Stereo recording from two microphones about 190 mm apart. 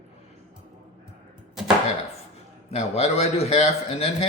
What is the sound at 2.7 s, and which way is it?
Speech, 35° left (ahead or behind).